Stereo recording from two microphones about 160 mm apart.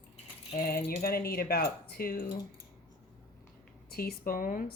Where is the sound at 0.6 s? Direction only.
70° left (ahead or behind).